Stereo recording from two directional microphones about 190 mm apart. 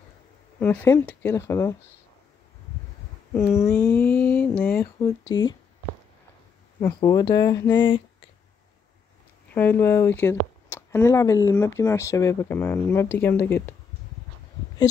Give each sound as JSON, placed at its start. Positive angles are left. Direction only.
{"t": 0.6, "sound": "speech", "side_deg": 10}
{"t": 3.3, "sound": "speech", "side_deg": 15}
{"t": 7.0, "sound": "speech", "side_deg": 20}
{"t": 9.5, "sound": "speech", "side_deg": 10}